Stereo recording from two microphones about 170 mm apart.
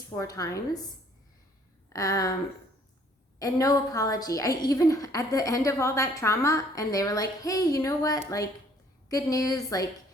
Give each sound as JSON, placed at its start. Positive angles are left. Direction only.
{"t": 0.1, "sound": "a woman's voice", "side_deg": 20}
{"t": 1.9, "sound": "speech", "side_deg": 20}
{"t": 3.3, "sound": "a woman's voice", "side_deg": 20}